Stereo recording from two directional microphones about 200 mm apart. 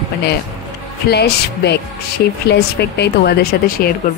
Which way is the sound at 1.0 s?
55° left (ahead or behind).